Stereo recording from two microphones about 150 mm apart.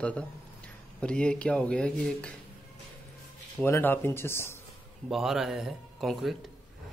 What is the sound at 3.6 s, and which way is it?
Speech, 15° left (ahead or behind).